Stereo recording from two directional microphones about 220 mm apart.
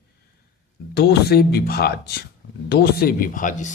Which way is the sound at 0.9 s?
45° left (ahead or behind).